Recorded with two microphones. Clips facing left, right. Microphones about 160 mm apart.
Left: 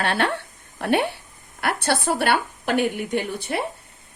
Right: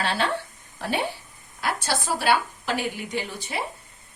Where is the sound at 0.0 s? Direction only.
60° left (ahead or behind).